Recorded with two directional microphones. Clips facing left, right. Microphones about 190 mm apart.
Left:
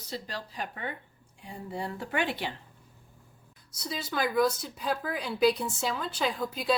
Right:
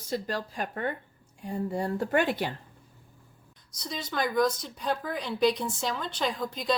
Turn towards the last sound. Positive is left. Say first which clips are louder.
# even
turn(degrees=5)  # may be behind; listen again after turning